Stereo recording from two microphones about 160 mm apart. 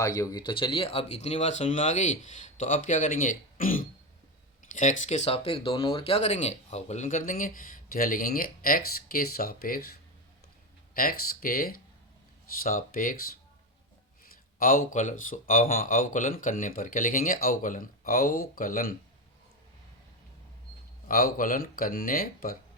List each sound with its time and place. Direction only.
0.0 s speech: 20° left (ahead or behind); by 3.8 s 60° left (ahead or behind)
4.7 s speech: 50° left (ahead or behind)
10.9 s speech: 65° left (ahead or behind)
14.6 s speech: 60° left (ahead or behind)
21.1 s speech: 60° left (ahead or behind)